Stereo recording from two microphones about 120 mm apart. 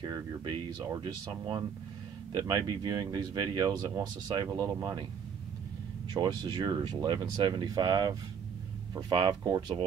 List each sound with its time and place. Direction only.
0.0 s speech: 40° right (ahead or behind)
6.1 s speech: 35° right (ahead or behind)
9.4 s speech: 30° right (ahead or behind)